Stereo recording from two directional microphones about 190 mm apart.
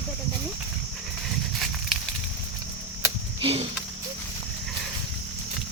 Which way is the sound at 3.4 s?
30° right (ahead or behind).